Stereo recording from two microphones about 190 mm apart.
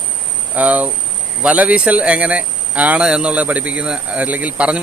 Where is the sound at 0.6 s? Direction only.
10° right (ahead or behind).